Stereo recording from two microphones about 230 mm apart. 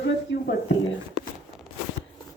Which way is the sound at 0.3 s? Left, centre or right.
Left.